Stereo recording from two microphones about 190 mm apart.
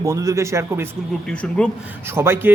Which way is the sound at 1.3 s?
5° left (ahead or behind).